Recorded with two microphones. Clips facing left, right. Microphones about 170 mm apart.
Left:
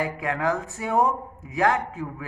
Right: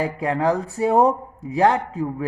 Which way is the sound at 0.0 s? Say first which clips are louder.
Right 5 dB; 35° right (ahead or behind).